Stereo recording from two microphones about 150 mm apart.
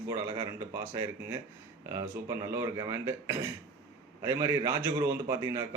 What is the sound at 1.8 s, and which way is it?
A man's voice, 20° right (ahead or behind).